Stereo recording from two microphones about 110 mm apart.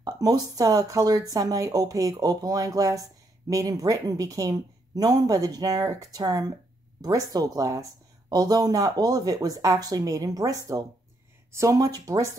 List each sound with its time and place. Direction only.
0.0 s speech: 35° right (ahead or behind)